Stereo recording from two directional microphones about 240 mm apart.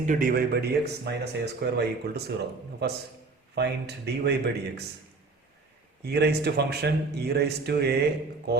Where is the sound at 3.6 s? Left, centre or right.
Right.